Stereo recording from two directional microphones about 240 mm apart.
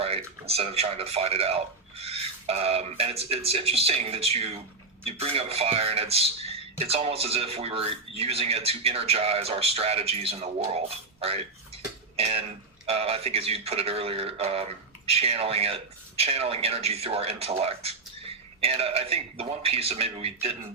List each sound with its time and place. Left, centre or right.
0.0 s speech: right